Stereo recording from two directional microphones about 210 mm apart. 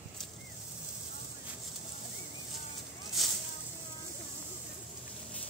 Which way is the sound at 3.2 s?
Centre (ahead or behind).